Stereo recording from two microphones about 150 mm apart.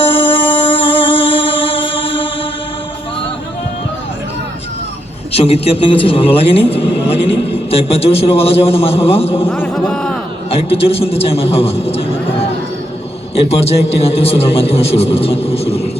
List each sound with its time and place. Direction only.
0.0 s music: 40° left (ahead or behind)
5.3 s a man's voice: 40° left (ahead or behind)
9.5 s speech: 10° left (ahead or behind)
10.5 s a man's voice: 40° left (ahead or behind)
13.3 s a man's voice: 40° left (ahead or behind)